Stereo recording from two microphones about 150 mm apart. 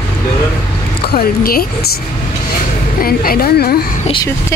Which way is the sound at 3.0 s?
80° left.